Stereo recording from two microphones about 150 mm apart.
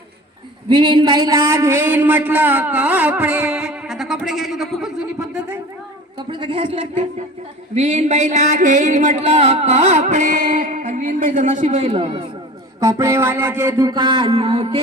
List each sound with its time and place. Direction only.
0.7 s a man's voice: 30° right (ahead or behind); by 5.5 s 5° right (ahead or behind)
6.1 s a woman's voice: 35° right (ahead or behind)
7.8 s a sound: 50° right (ahead or behind)
12.8 s music: 20° right (ahead or behind); by 14.8 s 40° right (ahead or behind)